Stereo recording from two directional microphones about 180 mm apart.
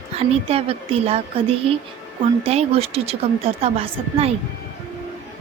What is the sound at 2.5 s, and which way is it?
A woman's voice, 35° right (ahead or behind).